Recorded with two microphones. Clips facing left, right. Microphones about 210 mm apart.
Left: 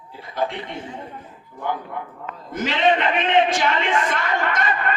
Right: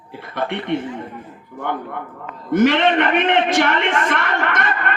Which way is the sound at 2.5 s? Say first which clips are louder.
Right 6 dB; 65° right (ahead or behind).